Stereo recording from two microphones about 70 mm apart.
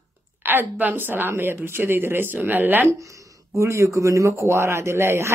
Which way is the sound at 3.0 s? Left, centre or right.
Right.